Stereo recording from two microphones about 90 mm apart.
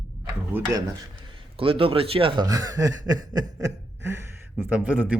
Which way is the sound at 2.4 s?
40° right (ahead or behind).